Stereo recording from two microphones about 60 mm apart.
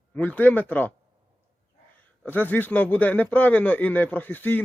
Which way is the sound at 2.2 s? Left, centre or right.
Left.